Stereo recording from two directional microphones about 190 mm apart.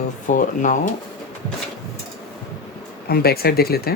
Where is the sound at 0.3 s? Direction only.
40° left (ahead or behind).